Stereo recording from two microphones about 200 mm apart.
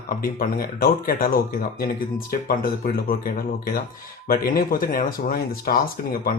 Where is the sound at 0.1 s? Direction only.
45° left (ahead or behind).